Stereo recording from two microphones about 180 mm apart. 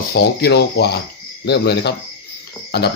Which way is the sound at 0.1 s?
65° left (ahead or behind).